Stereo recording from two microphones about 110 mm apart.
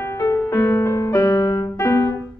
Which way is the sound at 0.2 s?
25° left (ahead or behind).